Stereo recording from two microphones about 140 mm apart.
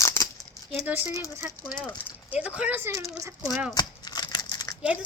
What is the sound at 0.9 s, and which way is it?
Speech, 10° right (ahead or behind).